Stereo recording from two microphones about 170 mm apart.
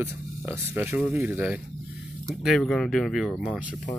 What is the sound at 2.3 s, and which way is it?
Speech, centre (ahead or behind).